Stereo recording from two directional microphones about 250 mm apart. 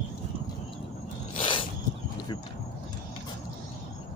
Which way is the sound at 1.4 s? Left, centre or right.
Left.